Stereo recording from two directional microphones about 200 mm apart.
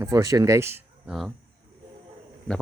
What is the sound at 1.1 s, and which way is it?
Speech, centre (ahead or behind).